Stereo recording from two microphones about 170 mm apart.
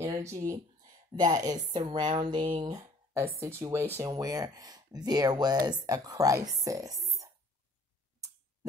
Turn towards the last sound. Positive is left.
turn(degrees=-20)  # may be behind; listen again after turning